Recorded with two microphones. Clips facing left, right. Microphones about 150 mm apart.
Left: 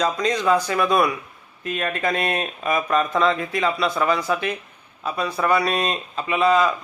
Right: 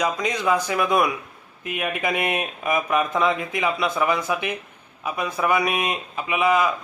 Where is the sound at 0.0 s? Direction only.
15° right (ahead or behind).